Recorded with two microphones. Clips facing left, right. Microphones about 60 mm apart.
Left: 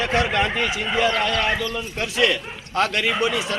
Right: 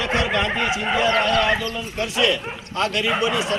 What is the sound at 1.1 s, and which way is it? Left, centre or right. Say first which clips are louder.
Speech: right 3 dB; right.